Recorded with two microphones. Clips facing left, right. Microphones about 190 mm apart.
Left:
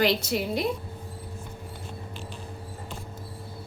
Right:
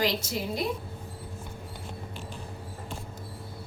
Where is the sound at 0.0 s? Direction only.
65° left (ahead or behind).